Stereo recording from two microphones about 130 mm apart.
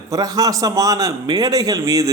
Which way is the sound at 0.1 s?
25° right (ahead or behind).